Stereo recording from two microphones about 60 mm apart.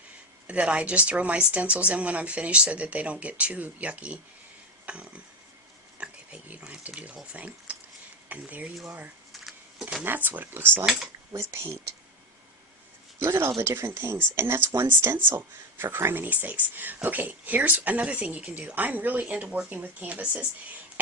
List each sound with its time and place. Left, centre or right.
0.4 s speech: right
4.9 s a sound: right
6.0 s speech: right
9.3 s a sound: centre
10.2 s speech: right
10.8 s speech: centre
11.3 s speech: right
13.1 s speech: right